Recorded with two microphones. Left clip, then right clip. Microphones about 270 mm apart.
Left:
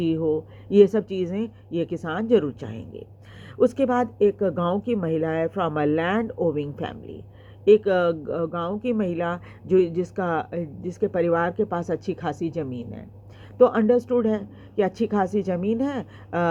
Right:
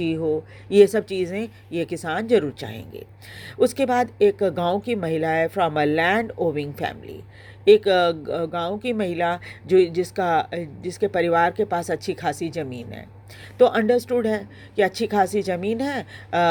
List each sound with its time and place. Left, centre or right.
0.0 s speech: right